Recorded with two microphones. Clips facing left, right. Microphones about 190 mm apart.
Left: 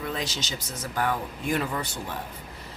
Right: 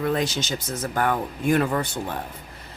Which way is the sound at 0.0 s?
55° right (ahead or behind).